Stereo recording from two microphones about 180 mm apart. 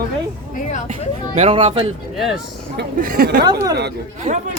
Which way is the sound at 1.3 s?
35° right (ahead or behind).